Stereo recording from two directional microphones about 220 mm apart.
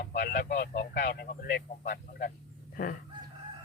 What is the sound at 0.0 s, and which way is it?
Speech, 45° left (ahead or behind).